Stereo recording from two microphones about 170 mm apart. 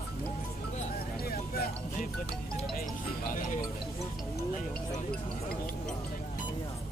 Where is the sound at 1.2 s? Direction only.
60° left (ahead or behind).